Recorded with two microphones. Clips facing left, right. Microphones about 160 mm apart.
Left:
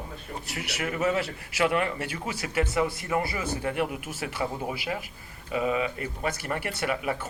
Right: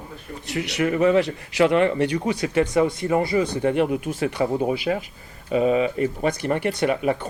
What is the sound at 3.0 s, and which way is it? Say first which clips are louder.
Speech: right 8 dB; 35° right (ahead or behind).